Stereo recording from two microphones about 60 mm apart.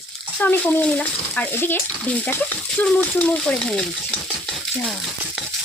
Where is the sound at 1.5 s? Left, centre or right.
Left.